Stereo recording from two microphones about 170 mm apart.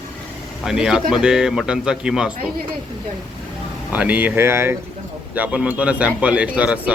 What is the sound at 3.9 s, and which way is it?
Speech, 10° right (ahead or behind).